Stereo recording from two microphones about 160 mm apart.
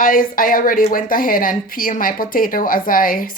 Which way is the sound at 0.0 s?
60° left (ahead or behind).